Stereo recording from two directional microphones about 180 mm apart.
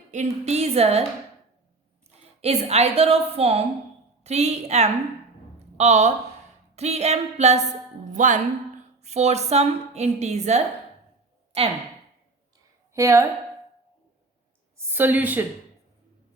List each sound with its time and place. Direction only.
0.1 s a woman's voice: 40° right (ahead or behind)
2.0 s a woman's voice: 35° right (ahead or behind)
12.9 s speech: 15° right (ahead or behind)
14.8 s a woman's voice: 10° right (ahead or behind)